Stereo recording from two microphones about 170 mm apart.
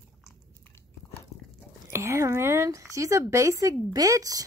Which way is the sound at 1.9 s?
15° right (ahead or behind).